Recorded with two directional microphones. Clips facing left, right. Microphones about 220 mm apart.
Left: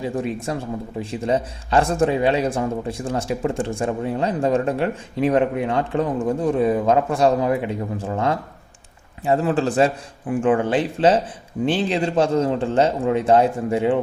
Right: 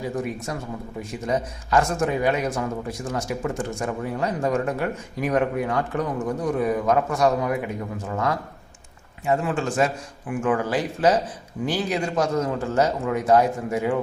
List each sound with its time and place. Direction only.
0.0 s speech: 25° left (ahead or behind)